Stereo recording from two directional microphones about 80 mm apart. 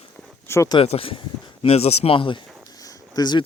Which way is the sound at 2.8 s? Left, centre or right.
Left.